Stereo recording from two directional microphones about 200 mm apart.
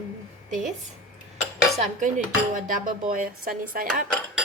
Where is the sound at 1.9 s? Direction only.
40° right (ahead or behind).